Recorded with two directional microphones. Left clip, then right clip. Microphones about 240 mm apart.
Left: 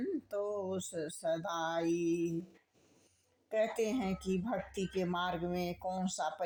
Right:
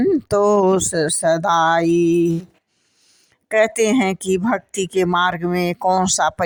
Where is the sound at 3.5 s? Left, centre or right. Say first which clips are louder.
Right 17 dB; right.